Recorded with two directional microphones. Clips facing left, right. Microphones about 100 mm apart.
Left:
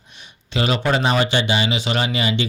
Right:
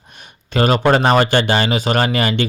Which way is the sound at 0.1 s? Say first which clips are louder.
Right 4 dB; 50° right (ahead or behind).